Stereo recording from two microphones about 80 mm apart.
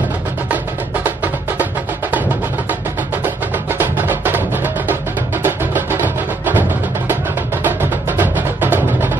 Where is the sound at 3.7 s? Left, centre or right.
Right.